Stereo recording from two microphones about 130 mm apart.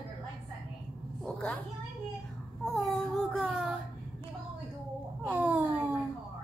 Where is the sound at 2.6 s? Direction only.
5° left (ahead or behind).